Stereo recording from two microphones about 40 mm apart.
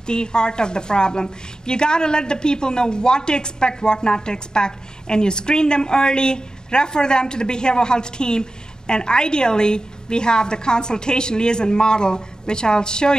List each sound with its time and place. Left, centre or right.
0.0 s a woman's voice: left